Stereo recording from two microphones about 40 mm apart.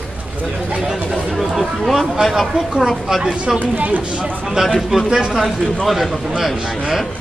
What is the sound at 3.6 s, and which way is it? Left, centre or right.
Speech, right.